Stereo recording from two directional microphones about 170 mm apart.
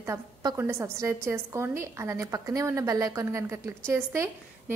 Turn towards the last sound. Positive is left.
turn(degrees=-15)  # may be behind; listen again after turning